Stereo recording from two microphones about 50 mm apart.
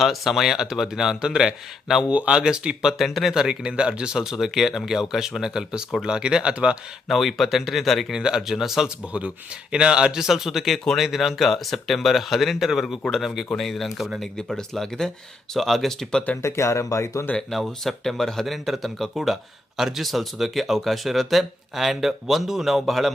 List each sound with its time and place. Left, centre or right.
0.0 s a man's voice: centre
2.0 s speech: right
3.0 s speech: centre
3.3 s a man's voice: centre
7.1 s speech: centre
8.1 s a man's voice: centre
9.7 s a man's voice: centre
16.4 s speech: left
17.5 s speech: centre